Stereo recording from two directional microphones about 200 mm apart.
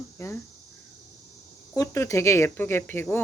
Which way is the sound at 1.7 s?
15° left (ahead or behind).